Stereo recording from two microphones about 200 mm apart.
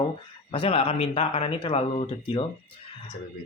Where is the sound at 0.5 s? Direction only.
25° left (ahead or behind).